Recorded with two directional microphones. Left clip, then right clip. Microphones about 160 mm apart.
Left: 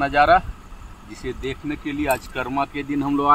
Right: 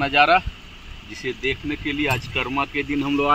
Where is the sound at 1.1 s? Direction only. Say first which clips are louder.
Right 4 dB; 20° left (ahead or behind).